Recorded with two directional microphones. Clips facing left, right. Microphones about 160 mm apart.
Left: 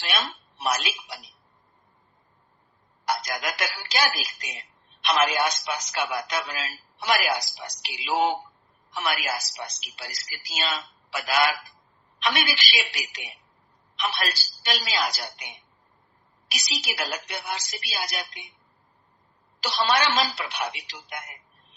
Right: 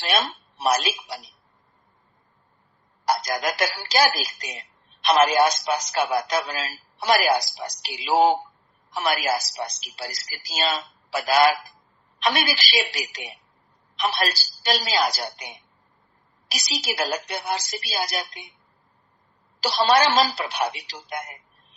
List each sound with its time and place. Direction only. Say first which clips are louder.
0.0 s a woman's voice: right 5 dB; 35° right (ahead or behind)
3.1 s speech: right 5 dB; 35° right (ahead or behind)
19.5 s speech: right 5 dB; 35° right (ahead or behind)